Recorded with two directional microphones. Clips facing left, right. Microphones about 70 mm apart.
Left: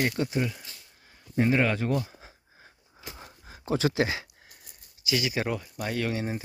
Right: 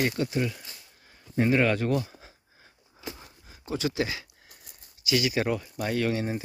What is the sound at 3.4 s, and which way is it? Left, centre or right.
Speech, left.